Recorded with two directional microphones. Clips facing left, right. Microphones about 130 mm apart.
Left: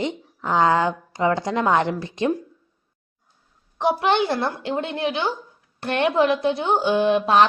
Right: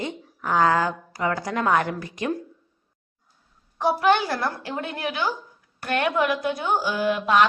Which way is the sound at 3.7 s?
25° left (ahead or behind).